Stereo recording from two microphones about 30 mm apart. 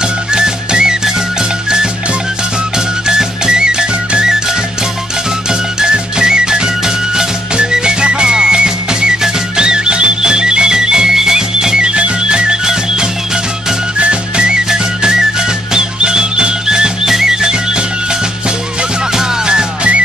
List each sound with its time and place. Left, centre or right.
0.3 s music: right
3.1 s music: right
5.5 s music: right
13.9 s music: right